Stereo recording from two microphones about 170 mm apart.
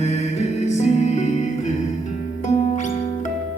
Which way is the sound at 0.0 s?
40° left (ahead or behind).